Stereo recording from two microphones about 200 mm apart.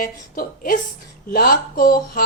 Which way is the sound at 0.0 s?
45° left (ahead or behind).